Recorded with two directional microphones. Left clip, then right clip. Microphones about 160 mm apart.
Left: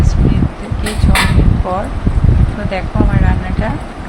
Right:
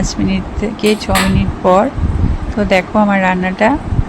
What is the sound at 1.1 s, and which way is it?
Speech, 35° right (ahead or behind).